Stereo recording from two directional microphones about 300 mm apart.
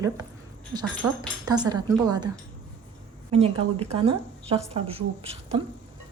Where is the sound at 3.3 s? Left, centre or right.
Centre.